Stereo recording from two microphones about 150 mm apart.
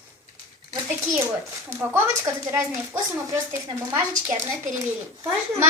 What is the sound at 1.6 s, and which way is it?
Speech, 20° right (ahead or behind).